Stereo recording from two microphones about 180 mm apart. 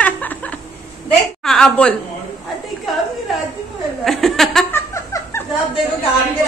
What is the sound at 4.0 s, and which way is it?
Chuckle, centre (ahead or behind).